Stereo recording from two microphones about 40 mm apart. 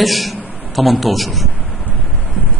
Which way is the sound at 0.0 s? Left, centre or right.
Centre.